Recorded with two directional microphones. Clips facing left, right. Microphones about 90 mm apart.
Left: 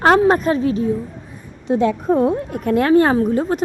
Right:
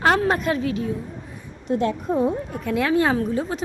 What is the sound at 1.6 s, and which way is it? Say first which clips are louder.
A woman's voice: left 6 dB; 75° left (ahead or behind).